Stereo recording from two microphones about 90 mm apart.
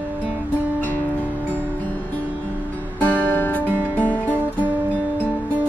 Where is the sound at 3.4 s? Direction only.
20° left (ahead or behind).